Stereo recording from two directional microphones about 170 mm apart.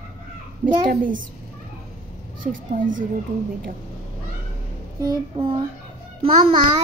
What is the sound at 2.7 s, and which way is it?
Speech, 50° right (ahead or behind).